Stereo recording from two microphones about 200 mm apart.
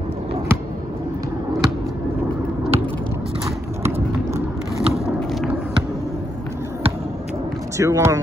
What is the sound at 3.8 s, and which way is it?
Run, 10° right (ahead or behind).